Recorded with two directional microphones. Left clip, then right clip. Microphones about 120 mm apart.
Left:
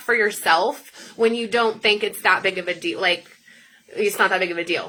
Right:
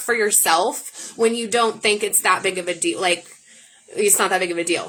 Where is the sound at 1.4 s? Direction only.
50° right (ahead or behind).